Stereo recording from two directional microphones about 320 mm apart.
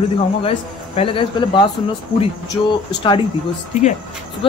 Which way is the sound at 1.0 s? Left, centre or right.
Centre.